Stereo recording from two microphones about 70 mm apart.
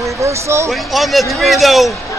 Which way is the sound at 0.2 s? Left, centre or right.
Right.